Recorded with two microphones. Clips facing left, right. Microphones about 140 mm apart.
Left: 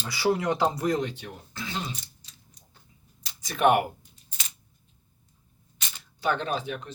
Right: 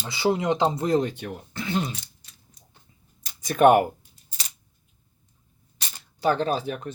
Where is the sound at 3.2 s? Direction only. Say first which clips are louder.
Right 6 dB; 50° right (ahead or behind).